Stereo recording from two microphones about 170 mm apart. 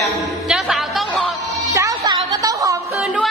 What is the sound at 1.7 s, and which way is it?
Music, 20° right (ahead or behind).